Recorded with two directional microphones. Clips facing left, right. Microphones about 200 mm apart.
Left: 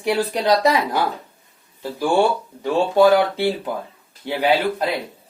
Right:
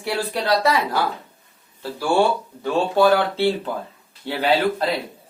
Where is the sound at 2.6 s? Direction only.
15° left (ahead or behind).